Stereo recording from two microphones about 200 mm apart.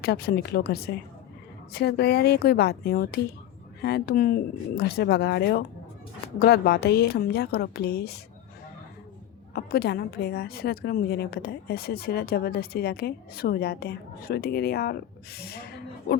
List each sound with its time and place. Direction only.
0.0 s a woman's voice: 50° left (ahead or behind)
9.5 s a woman's voice: 50° left (ahead or behind)